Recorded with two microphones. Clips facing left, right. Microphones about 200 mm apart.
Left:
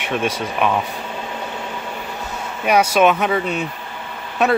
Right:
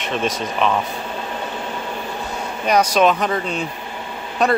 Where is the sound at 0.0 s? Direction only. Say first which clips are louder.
Left 1 dB; 10° left (ahead or behind).